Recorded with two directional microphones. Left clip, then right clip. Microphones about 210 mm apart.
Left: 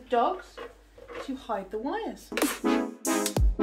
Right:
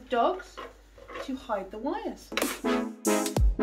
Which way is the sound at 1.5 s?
25° left (ahead or behind).